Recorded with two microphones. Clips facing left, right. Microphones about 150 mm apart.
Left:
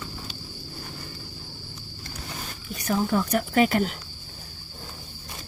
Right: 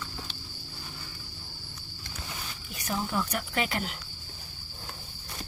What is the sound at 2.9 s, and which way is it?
Speech, 50° left (ahead or behind).